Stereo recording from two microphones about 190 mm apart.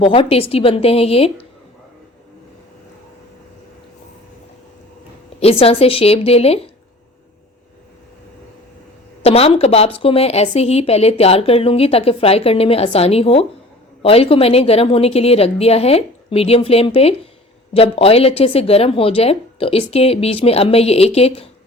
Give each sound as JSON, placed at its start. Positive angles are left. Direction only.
{"t": 0.0, "sound": "a woman's voice", "side_deg": 30}
{"t": 5.4, "sound": "a woman's voice", "side_deg": 30}
{"t": 9.2, "sound": "a woman's voice", "side_deg": 30}